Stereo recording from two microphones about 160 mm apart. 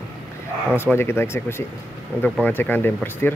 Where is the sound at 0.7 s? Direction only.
15° left (ahead or behind).